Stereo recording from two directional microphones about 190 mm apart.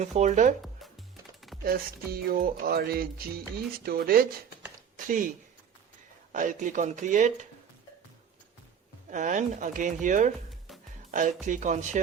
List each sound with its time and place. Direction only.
0.0 s speech: 40° right (ahead or behind)
1.6 s music: 50° right (ahead or behind)
4.9 s speech: 45° right (ahead or behind)
6.3 s speech: 45° right (ahead or behind)
9.0 s speech: 40° right (ahead or behind)